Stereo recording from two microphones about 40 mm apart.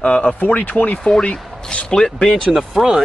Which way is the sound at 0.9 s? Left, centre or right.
Centre.